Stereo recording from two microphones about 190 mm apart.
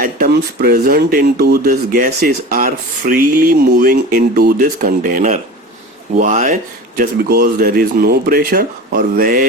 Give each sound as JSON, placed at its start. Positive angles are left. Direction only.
{"t": 0.0, "sound": "speech", "side_deg": -50}